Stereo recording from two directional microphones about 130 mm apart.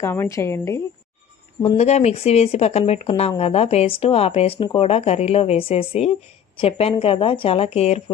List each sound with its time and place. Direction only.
0.0 s a woman's voice: 20° left (ahead or behind)
1.6 s speech: 50° left (ahead or behind)